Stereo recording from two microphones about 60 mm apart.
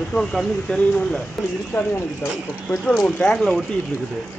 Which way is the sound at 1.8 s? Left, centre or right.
Left.